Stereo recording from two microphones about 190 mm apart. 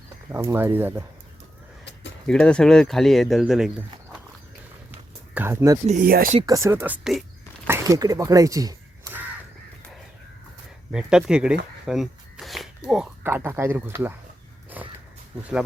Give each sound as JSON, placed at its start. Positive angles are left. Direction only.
{"t": 0.3, "sound": "speech", "side_deg": -15}
{"t": 1.8, "sound": "a sound", "side_deg": 65}
{"t": 2.2, "sound": "speech", "side_deg": 5}
{"t": 4.9, "sound": "a sound", "side_deg": -10}
{"t": 5.8, "sound": "speech", "side_deg": -35}
{"t": 6.4, "sound": "speech", "side_deg": -15}
{"t": 7.7, "sound": "speech", "side_deg": -15}
{"t": 10.9, "sound": "speech", "side_deg": -5}